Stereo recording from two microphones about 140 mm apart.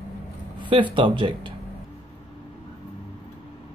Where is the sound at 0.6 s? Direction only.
35° right (ahead or behind).